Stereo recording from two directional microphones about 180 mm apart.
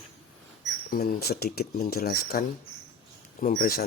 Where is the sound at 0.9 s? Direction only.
55° left (ahead or behind).